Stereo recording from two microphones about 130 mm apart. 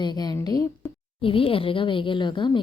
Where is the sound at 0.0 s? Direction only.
35° left (ahead or behind).